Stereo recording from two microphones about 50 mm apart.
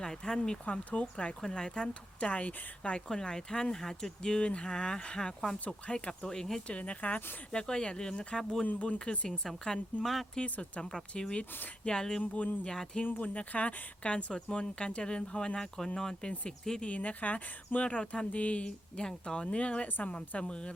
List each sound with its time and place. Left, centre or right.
0.0 s speech: centre
0.6 s speech: left
1.4 s speech: centre; by 3.0 s left
3.1 s speech: centre
6.7 s speech: left
7.5 s speech: centre
8.6 s speech: left
9.0 s speech: centre
10.3 s speech: centre
12.2 s speech: left
12.6 s speech: centre
13.1 s speech: left; by 16.3 s centre
16.8 s speech: left